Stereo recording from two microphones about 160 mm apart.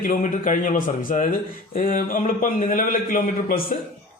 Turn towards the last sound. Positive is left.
turn(degrees=60)  # may be behind; listen again after turning